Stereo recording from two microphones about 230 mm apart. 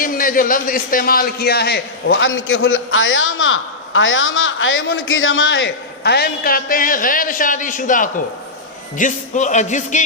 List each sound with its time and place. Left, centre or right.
0.0 s a man's voice: left